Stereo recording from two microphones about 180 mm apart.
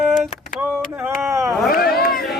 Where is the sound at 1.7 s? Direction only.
60° left (ahead or behind).